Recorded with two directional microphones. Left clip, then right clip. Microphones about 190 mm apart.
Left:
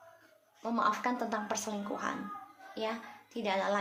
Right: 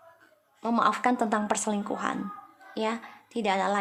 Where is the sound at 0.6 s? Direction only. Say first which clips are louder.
Right 7 dB; 45° right (ahead or behind).